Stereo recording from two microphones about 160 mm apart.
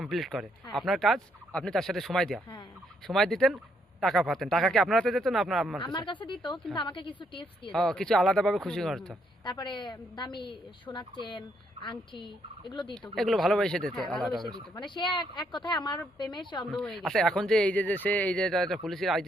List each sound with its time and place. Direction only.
0.0 s speech: centre (ahead or behind)
5.8 s fowl: 30° left (ahead or behind)
7.7 s speech: 5° left (ahead or behind)
9.4 s fowl: 30° left (ahead or behind)
12.9 s speech: centre (ahead or behind)
14.8 s fowl: 30° left (ahead or behind)
16.7 s speech: 5° left (ahead or behind)